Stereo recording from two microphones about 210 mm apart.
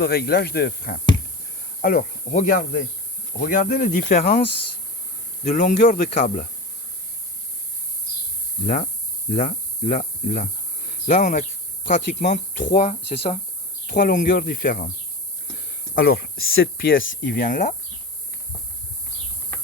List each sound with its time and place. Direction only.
0.0 s speech: 50° left (ahead or behind)
5.5 s speech: 40° left (ahead or behind)
8.6 s speech: 40° left (ahead or behind)
16.0 s speech: 50° left (ahead or behind); by 17.2 s 65° left (ahead or behind)
17.2 s speech: 45° left (ahead or behind)